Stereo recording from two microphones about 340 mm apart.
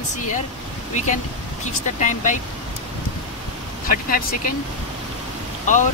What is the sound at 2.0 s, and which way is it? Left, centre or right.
Speech, left.